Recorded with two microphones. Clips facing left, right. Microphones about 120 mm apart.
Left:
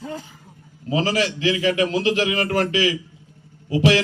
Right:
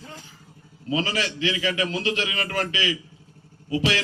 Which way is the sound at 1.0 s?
55° left (ahead or behind).